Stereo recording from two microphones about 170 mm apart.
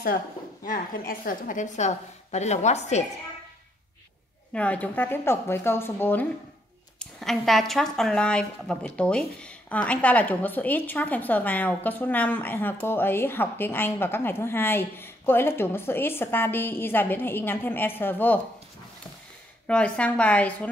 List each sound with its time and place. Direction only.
0.7 s a woman's voice: 55° left (ahead or behind)
4.6 s speech: 10° left (ahead or behind)
7.0 s speech: centre (ahead or behind)
19.7 s speech: 5° left (ahead or behind)